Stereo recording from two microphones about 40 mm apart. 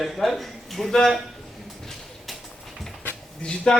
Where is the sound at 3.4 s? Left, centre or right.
Left.